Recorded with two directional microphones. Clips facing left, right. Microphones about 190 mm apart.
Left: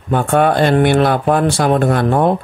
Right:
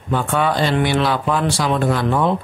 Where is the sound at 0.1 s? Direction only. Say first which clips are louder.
Left 6 dB; 55° left (ahead or behind).